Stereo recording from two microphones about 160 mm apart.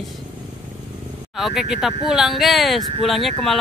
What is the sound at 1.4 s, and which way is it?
Speech, centre (ahead or behind).